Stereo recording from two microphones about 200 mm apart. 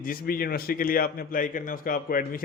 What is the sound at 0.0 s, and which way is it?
A man's voice, 45° left (ahead or behind).